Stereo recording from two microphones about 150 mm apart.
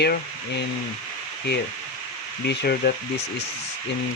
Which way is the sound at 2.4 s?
90° left.